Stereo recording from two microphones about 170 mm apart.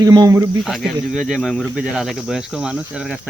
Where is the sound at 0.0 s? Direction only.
20° right (ahead or behind).